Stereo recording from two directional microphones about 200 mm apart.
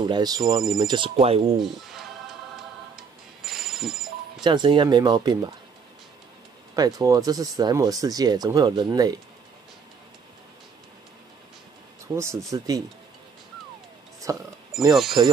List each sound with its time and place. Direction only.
0.0 s speech: 20° right (ahead or behind)
1.6 s music: centre (ahead or behind)
4.4 s speech: 20° right (ahead or behind)
6.7 s speech: 20° right (ahead or behind)
12.2 s speech: 15° right (ahead or behind)
14.3 s speech: 15° right (ahead or behind)